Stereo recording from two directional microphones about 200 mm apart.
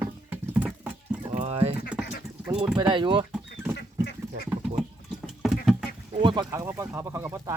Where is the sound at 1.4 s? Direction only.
30° right (ahead or behind).